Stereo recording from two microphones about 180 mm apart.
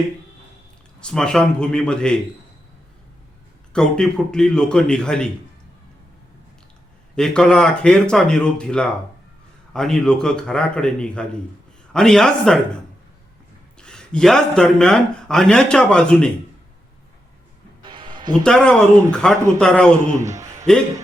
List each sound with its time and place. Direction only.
0.9 s speech: 5° left (ahead or behind)
3.7 s speech: 5° left (ahead or behind)
7.2 s speech: 5° left (ahead or behind)
13.7 s a man's voice: 5° left (ahead or behind)
17.8 s music: 25° right (ahead or behind)
18.4 s speech: 5° left (ahead or behind)
20.1 s a sound: 15° right (ahead or behind)